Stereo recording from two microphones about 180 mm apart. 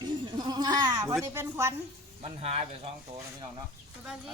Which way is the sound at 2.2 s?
35° right (ahead or behind).